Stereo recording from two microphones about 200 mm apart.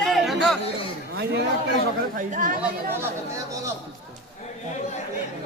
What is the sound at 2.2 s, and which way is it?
Speech, 40° right (ahead or behind).